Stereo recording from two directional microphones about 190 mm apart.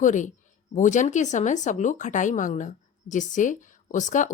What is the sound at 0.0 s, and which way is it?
A woman's voice, 40° left (ahead or behind).